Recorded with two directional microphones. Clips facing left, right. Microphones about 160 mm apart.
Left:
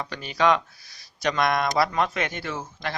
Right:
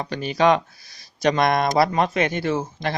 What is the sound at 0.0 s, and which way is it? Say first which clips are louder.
Speech: right 4 dB; 20° right (ahead or behind).